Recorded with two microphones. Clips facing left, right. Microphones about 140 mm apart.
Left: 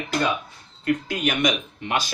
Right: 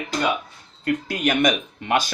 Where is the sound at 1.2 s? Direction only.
50° right (ahead or behind).